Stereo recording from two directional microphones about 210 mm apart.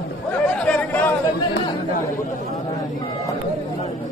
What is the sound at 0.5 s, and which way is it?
Chatter, 5° left (ahead or behind).